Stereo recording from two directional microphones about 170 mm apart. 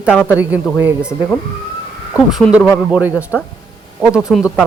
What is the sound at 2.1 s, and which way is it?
Speech, centre (ahead or behind).